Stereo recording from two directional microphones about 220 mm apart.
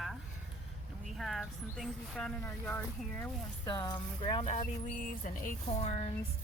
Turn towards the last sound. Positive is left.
turn(degrees=30)  # may be behind; listen again after turning